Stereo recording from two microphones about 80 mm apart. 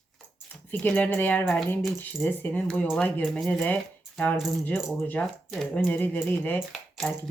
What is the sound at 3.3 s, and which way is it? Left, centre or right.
Speech, centre.